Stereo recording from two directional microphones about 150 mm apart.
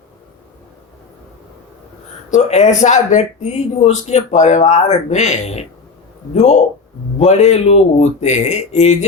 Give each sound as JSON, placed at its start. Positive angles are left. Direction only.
{"t": 2.3, "sound": "speech", "side_deg": 50}